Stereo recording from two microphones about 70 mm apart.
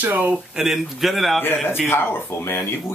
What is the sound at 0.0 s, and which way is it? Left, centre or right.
Speech, right.